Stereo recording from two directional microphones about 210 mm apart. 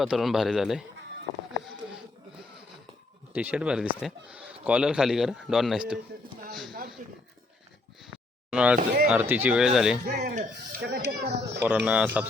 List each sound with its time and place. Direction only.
0.0 s a man's voice: centre (ahead or behind)
3.3 s a man's voice: 5° right (ahead or behind)
6.5 s a sound: centre (ahead or behind)
7.0 s speech: 40° right (ahead or behind)
8.0 s a sound: 5° right (ahead or behind)
9.0 s a man's voice: 5° right (ahead or behind)
10.2 s speech: 45° right (ahead or behind)
11.6 s speech: 5° right (ahead or behind)